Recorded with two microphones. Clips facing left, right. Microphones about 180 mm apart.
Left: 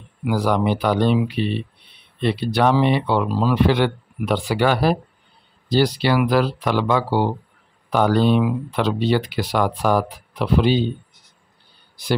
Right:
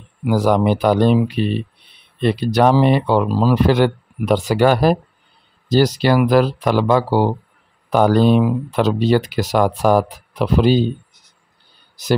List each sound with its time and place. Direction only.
0.3 s speech: 45° right (ahead or behind)